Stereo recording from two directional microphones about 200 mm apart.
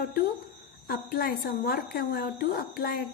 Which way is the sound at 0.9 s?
50° left (ahead or behind).